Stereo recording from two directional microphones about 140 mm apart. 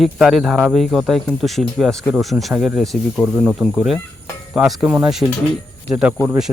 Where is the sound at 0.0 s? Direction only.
Centre (ahead or behind).